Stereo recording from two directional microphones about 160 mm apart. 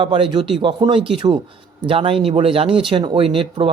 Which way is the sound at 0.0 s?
30° right (ahead or behind).